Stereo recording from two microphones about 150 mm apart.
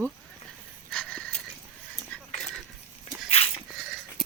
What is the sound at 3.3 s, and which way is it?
Goat, 40° left (ahead or behind).